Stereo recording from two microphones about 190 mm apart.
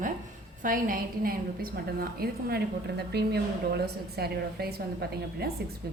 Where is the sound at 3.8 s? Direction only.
55° right (ahead or behind).